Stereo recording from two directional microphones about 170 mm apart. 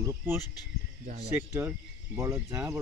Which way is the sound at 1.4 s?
15° right (ahead or behind).